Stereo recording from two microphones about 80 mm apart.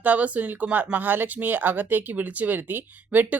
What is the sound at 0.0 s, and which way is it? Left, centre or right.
Speech, centre.